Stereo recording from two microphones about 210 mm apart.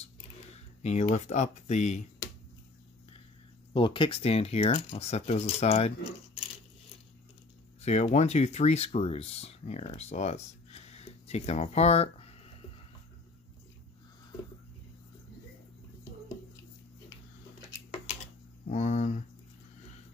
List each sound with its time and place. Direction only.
0.0 s a sound: 30° left (ahead or behind)
3.7 s speech: 25° left (ahead or behind)
7.8 s speech: 30° left (ahead or behind)
18.7 s speech: 35° left (ahead or behind)